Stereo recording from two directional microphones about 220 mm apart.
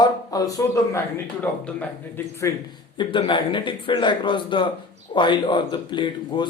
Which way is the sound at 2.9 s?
20° left (ahead or behind).